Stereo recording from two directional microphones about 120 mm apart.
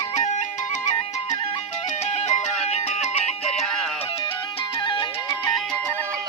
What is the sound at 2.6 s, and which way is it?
Music, 70° left (ahead or behind).